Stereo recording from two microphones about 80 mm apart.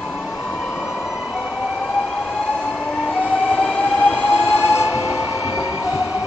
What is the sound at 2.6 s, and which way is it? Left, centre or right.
Vehicle, centre.